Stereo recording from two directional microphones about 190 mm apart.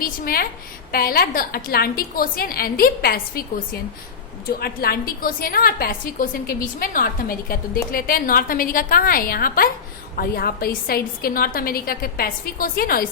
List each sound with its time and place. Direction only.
0.0 s a woman's voice: 50° left (ahead or behind)
4.4 s a woman's voice: 55° left (ahead or behind)